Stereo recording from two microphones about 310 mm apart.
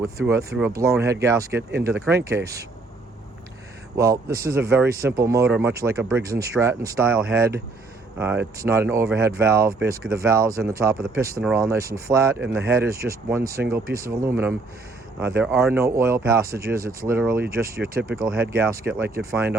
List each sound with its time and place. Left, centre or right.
0.3 s speech: centre
3.9 s speech: centre
16.6 s speech: right
16.8 s speech: centre
17.7 s speech: right
18.1 s speech: centre